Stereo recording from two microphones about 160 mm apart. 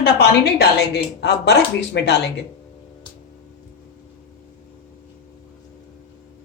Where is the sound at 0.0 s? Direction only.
90° left.